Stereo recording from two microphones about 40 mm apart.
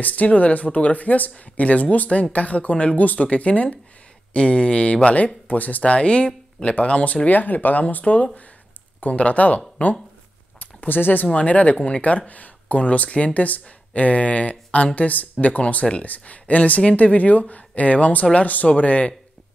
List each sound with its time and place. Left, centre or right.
0.0 s speech: left
5.5 s speech: left
7.2 s speech: left
10.9 s speech: left
11.3 s speech: left